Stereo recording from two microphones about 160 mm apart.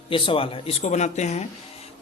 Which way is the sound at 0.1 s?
35° left (ahead or behind).